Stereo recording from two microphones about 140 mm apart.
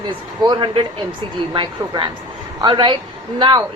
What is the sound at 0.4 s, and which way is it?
A woman's voice, 35° right (ahead or behind).